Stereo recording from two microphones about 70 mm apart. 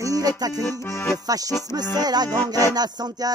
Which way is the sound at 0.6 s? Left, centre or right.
Left.